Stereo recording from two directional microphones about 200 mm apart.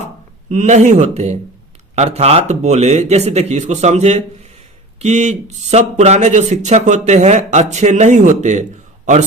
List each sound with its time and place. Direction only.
0.5 s speech: 35° right (ahead or behind)